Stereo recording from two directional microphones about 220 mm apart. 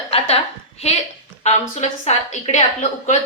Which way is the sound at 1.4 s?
30° left (ahead or behind).